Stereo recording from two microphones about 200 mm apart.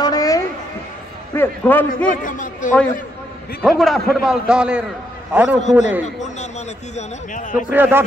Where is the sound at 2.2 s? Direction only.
40° left (ahead or behind).